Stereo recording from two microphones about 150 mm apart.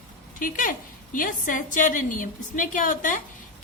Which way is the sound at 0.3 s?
65° left (ahead or behind).